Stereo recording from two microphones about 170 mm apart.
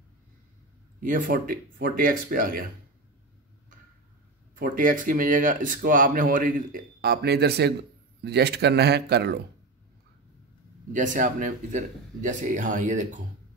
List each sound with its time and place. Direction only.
1.0 s speech: 50° right (ahead or behind)
4.6 s a man's voice: 50° right (ahead or behind); by 9.4 s 75° right (ahead or behind)
10.9 s speech: 50° right (ahead or behind)